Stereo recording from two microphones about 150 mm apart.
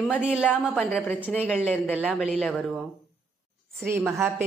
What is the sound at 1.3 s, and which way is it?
Speech, 10° left (ahead or behind).